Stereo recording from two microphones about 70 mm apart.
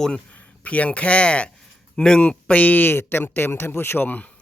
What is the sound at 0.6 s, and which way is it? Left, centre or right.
Speech, centre.